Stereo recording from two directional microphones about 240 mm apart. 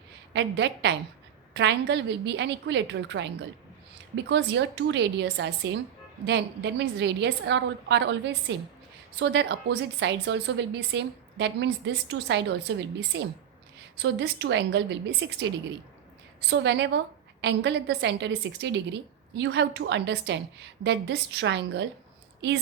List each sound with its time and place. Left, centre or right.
0.3 s a woman's voice: right
16.5 s a woman's voice: right